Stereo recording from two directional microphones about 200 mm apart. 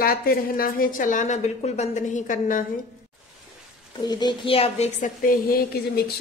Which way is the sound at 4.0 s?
20° left (ahead or behind).